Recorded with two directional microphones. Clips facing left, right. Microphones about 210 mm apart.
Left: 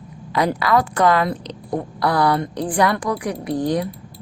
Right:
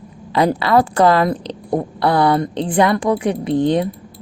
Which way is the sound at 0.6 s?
30° right (ahead or behind).